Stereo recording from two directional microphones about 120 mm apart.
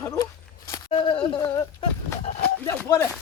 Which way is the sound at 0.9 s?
45° left (ahead or behind).